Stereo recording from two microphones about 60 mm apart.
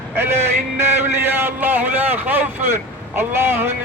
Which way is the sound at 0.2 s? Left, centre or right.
Right.